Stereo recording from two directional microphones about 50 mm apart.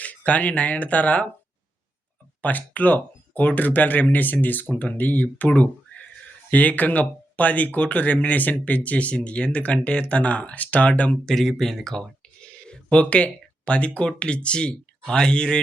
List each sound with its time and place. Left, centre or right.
0.0 s speech: left
2.4 s speech: left
6.5 s speech: left
11.3 s speech: centre
12.4 s speech: centre